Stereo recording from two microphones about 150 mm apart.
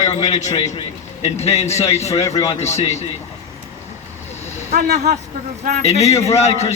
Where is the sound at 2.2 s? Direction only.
25° left (ahead or behind).